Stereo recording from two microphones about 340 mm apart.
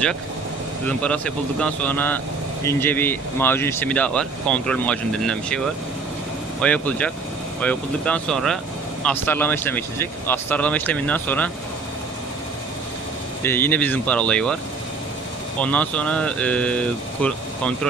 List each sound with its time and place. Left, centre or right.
0.8 s speech: centre
6.6 s speech: centre
13.4 s speech: centre
15.6 s speech: centre